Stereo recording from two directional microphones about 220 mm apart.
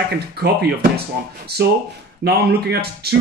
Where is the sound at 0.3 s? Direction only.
45° right (ahead or behind).